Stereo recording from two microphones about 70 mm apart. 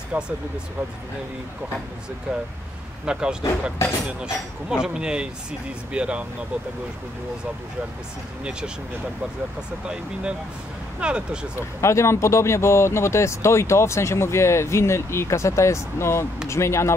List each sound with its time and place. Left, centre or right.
0.1 s speech: right
3.1 s speech: centre
8.5 s speech: centre
11.0 s speech: centre
11.8 s speech: left